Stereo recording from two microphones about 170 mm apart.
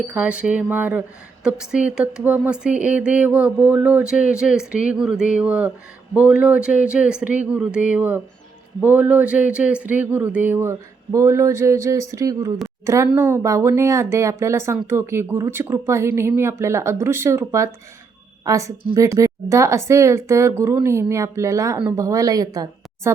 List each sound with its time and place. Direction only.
0.1 s a woman's voice: 10° right (ahead or behind)